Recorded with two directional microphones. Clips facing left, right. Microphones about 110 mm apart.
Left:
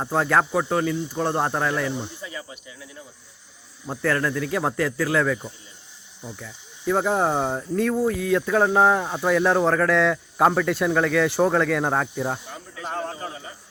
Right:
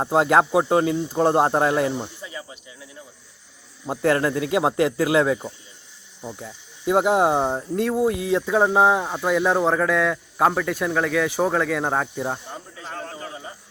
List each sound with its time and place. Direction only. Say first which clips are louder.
0.0 s speech: right 3 dB; 20° right (ahead or behind)
3.8 s speech: right 4 dB; 20° right (ahead or behind)
6.8 s speech: right 3 dB; 15° right (ahead or behind)
12.9 s a sound: left 4 dB; 30° left (ahead or behind)